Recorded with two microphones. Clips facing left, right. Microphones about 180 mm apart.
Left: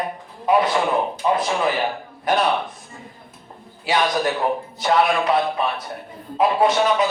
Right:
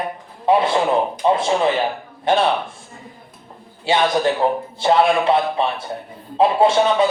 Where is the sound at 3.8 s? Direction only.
25° right (ahead or behind).